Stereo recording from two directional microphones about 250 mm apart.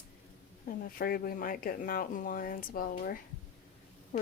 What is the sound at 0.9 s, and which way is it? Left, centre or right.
Speech, left.